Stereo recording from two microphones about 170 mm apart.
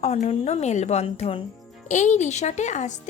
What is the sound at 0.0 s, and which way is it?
A woman's voice, 40° left (ahead or behind).